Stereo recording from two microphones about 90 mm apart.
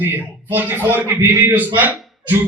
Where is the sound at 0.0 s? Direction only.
20° right (ahead or behind).